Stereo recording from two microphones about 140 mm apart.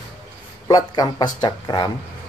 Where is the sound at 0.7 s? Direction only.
30° left (ahead or behind).